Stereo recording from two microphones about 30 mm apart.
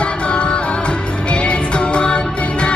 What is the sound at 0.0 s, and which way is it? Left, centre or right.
Music, left.